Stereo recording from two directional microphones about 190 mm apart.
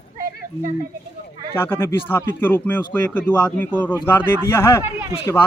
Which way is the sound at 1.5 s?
10° left (ahead or behind).